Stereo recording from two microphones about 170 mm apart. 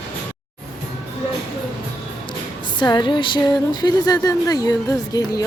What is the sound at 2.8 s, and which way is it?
Speech, 25° left (ahead or behind).